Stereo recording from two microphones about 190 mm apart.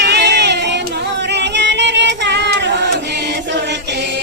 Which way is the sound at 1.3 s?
65° right (ahead or behind).